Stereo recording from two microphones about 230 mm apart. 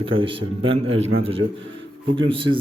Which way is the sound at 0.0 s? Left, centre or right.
Right.